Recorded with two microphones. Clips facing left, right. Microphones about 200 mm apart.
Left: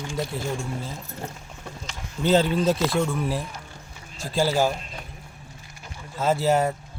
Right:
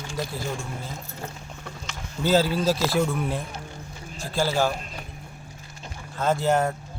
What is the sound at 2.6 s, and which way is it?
Speech, 5° right (ahead or behind).